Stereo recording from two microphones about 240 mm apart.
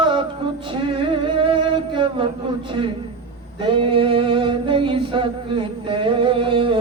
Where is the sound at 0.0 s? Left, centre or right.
Right.